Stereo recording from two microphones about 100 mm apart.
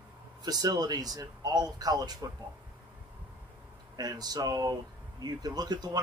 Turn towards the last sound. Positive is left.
turn(degrees=-45)  # may be behind; listen again after turning